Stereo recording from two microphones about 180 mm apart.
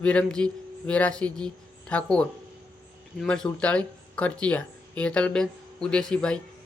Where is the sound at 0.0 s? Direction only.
5° left (ahead or behind).